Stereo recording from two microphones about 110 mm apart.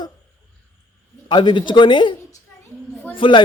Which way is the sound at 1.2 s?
45° left (ahead or behind).